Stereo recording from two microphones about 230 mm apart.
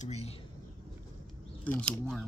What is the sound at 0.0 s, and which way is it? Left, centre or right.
Speech, left.